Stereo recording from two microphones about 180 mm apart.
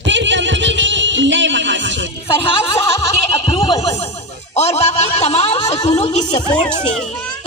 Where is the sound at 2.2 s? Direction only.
30° left (ahead or behind).